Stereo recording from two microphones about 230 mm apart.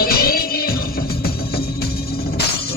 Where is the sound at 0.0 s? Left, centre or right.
Left.